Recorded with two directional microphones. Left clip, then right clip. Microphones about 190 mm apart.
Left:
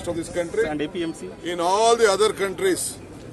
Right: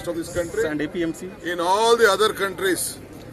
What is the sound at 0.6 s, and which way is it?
Speech, 30° right (ahead or behind).